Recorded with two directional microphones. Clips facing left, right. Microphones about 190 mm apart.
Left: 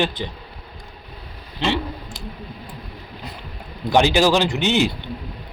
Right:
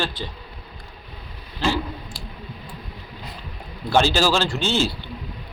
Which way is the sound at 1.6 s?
25° left (ahead or behind).